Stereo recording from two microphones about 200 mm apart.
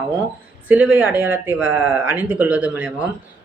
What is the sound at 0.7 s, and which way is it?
Speech, 10° right (ahead or behind).